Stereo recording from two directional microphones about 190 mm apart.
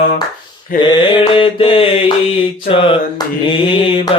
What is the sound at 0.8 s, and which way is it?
Mantra, 25° left (ahead or behind).